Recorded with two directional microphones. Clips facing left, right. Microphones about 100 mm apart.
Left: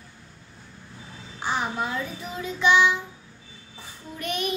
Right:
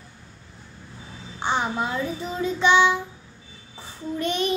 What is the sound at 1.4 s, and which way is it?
Child singing, 25° right (ahead or behind).